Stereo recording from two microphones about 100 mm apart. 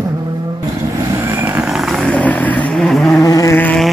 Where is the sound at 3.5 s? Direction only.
15° left (ahead or behind).